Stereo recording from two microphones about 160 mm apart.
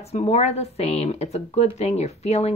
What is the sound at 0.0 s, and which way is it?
Speech, 40° left (ahead or behind).